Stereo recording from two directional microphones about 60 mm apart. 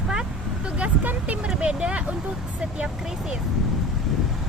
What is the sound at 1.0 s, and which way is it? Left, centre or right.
Speech, right.